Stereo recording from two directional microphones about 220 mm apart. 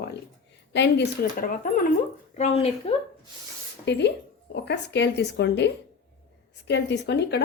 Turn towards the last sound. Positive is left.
turn(degrees=50)  # may be behind; listen again after turning